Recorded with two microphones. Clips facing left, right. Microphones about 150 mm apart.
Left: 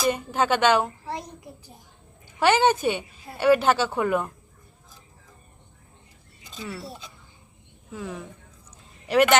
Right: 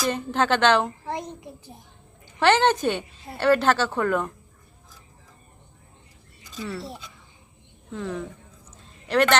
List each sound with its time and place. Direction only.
0.1 s a woman's voice: 10° left (ahead or behind)
1.0 s a sound: 20° right (ahead or behind)
2.2 s a woman's voice: 10° left (ahead or behind)
7.9 s a woman's voice: 10° left (ahead or behind)